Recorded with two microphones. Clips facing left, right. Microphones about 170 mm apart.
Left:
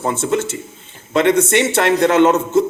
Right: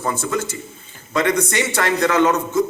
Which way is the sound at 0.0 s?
25° left (ahead or behind).